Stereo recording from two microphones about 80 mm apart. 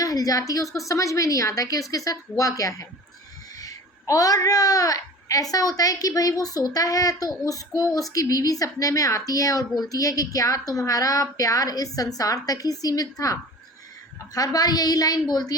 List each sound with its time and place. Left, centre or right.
0.0 s a woman's voice: left